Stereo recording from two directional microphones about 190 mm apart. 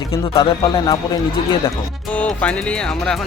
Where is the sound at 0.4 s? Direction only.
20° left (ahead or behind).